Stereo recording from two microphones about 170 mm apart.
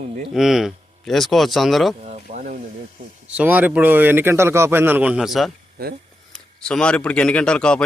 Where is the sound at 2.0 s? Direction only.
40° right (ahead or behind).